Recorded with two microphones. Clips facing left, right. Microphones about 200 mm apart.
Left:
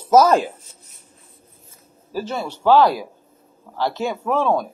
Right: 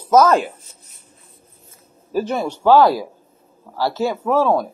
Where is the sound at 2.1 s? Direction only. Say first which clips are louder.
Right 5 dB; 15° right (ahead or behind).